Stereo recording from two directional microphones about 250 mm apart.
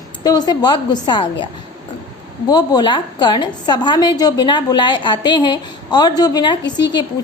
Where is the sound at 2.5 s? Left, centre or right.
Centre.